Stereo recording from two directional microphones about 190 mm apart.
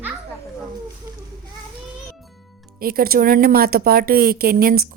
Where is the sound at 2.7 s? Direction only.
50° right (ahead or behind).